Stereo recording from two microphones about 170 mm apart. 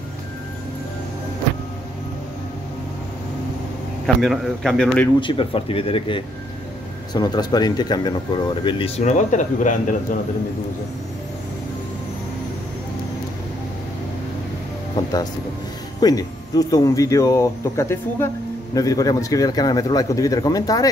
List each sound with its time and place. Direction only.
4.0 s a man's voice: centre (ahead or behind)
5.2 s speech: 30° left (ahead or behind); by 9.8 s 45° left (ahead or behind)
16.0 s speech: 20° left (ahead or behind)